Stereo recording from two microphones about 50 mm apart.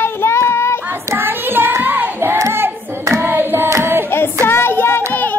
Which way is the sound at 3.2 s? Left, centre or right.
Right.